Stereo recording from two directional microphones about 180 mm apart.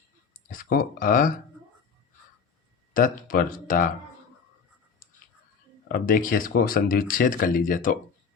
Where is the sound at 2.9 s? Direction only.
50° left (ahead or behind).